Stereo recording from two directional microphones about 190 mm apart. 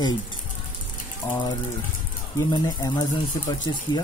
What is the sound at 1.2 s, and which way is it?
Speech, 15° left (ahead or behind).